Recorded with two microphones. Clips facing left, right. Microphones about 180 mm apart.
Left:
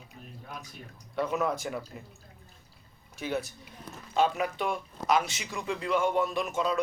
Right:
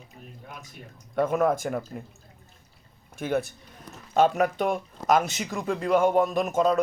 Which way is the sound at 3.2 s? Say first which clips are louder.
Right 5 dB; 50° right (ahead or behind).